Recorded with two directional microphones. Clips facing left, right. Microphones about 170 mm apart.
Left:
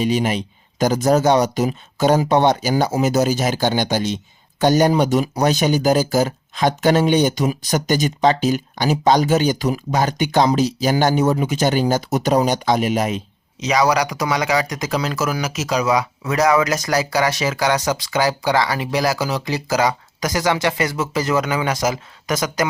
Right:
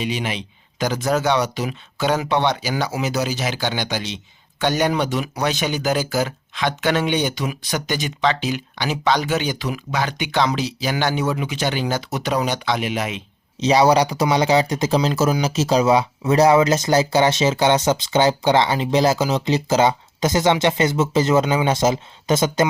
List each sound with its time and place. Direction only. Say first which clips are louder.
0.0 s speech: left 6 dB; 40° left (ahead or behind)
13.6 s speech: right 3 dB; 30° right (ahead or behind)